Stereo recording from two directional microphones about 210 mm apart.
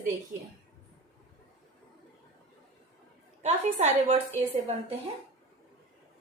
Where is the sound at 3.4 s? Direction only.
30° right (ahead or behind).